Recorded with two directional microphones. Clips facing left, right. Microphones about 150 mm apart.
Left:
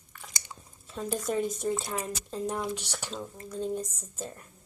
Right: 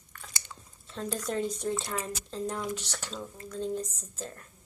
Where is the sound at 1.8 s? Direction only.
10° left (ahead or behind).